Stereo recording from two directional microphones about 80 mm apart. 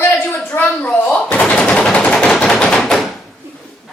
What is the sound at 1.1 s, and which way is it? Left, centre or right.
Machine gun, centre.